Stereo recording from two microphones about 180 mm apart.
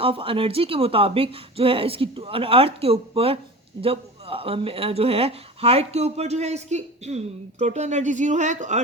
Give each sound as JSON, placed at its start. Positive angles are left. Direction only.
{"t": 0.0, "sound": "speech", "side_deg": -30}